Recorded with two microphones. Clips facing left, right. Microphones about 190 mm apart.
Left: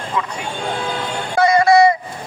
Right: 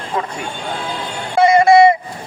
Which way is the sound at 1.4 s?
25° right (ahead or behind).